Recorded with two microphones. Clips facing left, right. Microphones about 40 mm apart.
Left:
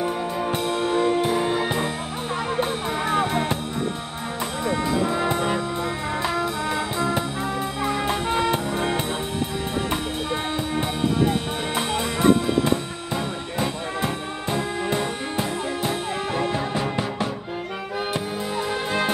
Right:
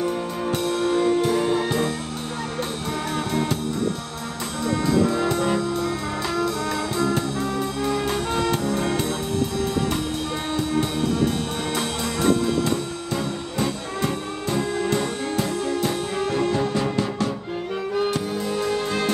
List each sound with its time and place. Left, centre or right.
0.0 s music: centre
3.1 s music: left
4.6 s brass instrument: centre
10.5 s music: left
17.9 s music: centre